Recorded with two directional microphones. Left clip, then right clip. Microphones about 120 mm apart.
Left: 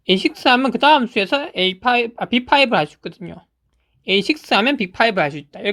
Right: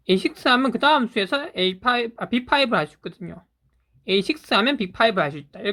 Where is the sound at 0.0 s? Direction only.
30° left (ahead or behind).